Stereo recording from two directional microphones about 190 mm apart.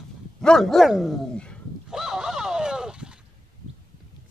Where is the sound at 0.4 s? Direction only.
5° left (ahead or behind).